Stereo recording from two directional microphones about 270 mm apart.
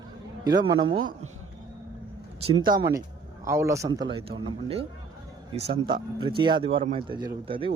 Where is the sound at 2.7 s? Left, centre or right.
Right.